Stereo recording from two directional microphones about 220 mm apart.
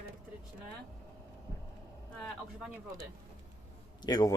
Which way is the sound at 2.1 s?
5° left (ahead or behind).